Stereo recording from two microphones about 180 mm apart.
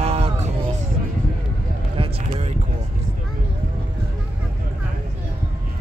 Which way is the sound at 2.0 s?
35° right (ahead or behind).